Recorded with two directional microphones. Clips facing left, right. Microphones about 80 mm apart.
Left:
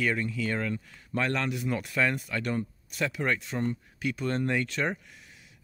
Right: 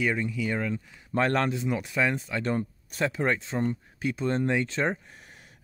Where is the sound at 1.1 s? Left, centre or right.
Right.